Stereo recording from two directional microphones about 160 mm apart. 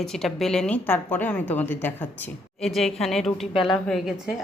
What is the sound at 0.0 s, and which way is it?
Speech, 5° left (ahead or behind).